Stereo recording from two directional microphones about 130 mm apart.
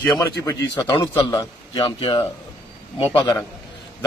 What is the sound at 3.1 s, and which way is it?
Speech, 15° left (ahead or behind).